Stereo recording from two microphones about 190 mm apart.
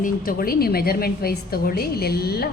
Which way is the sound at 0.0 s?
50° left (ahead or behind).